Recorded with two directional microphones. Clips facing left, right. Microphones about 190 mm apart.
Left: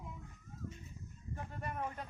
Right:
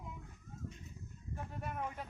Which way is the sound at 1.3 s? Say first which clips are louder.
Even; centre (ahead or behind).